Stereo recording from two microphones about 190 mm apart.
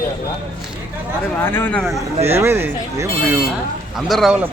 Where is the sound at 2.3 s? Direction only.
10° right (ahead or behind).